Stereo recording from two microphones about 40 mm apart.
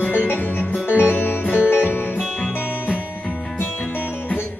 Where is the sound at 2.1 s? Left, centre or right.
Centre.